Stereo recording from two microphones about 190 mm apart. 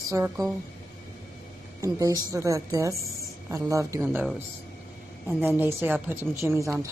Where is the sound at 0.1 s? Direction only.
15° right (ahead or behind).